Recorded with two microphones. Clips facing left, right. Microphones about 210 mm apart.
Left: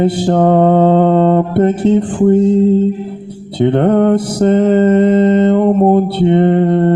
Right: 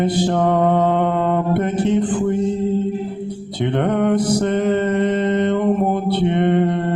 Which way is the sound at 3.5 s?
30° left (ahead or behind).